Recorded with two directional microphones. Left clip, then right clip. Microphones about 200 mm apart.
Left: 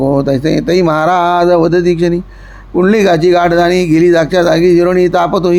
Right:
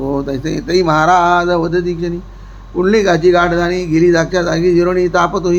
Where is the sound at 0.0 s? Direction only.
40° left (ahead or behind).